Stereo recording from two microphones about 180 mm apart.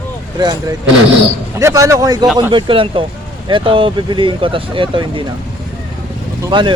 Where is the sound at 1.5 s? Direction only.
15° right (ahead or behind).